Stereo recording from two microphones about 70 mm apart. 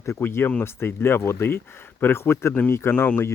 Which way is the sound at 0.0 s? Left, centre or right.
Left.